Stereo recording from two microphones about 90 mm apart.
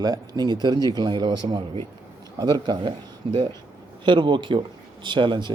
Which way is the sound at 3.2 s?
70° right (ahead or behind).